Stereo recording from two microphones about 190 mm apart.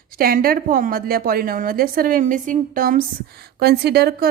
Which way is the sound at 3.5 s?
60° right (ahead or behind).